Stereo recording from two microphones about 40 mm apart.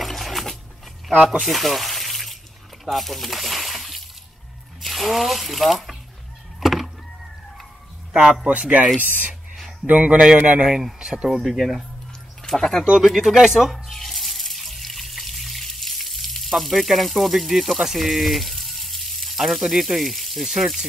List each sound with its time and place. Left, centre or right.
0.0 s a sound: centre
1.4 s water: centre
2.8 s speech: centre
6.6 s power windows: centre
8.1 s a man's voice: centre
8.5 s speech: right
10.6 s speech: centre
12.4 s speech: centre
13.0 s speech: centre
13.9 s water: centre
20.4 s speech: centre